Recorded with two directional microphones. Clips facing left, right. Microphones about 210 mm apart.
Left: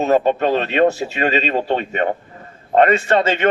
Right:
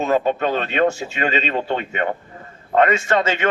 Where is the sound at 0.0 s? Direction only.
40° left (ahead or behind).